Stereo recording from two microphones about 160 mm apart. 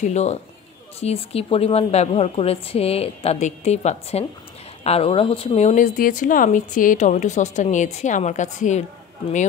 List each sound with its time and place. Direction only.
0.0 s a woman's voice: 45° left (ahead or behind)